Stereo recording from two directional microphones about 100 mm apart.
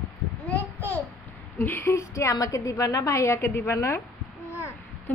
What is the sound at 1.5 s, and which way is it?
A woman's voice, 25° left (ahead or behind).